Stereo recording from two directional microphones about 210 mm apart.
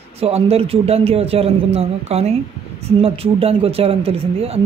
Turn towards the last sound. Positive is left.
turn(degrees=-30)  # may be behind; listen again after turning